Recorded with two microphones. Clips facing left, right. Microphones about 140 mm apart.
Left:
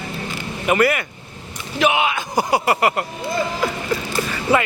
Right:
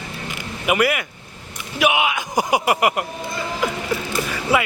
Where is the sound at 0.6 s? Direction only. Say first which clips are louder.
Left 2 dB; 10° right (ahead or behind).